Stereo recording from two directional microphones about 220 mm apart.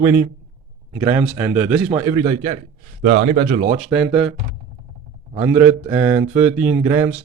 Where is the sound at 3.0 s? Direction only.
60° right (ahead or behind).